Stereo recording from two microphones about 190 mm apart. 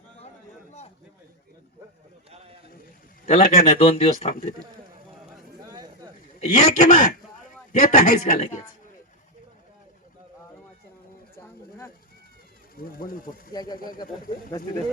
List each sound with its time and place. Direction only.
3.2 s a man's voice: 35° left (ahead or behind)
5.6 s a sound: 20° right (ahead or behind)
6.4 s a man's voice: 40° left (ahead or behind)
12.7 s speech: 50° left (ahead or behind)
13.5 s speech: 20° left (ahead or behind)